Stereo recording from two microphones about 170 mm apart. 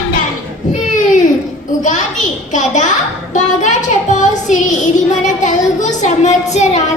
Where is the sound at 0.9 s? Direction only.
45° left (ahead or behind).